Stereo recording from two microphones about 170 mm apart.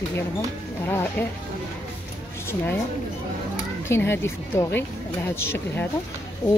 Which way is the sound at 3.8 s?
15° left (ahead or behind).